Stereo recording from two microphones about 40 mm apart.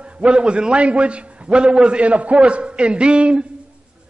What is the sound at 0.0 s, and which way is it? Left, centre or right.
A man's voice, right.